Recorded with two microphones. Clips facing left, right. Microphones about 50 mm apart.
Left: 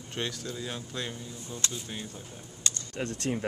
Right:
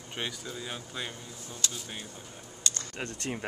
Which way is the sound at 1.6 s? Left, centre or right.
Left.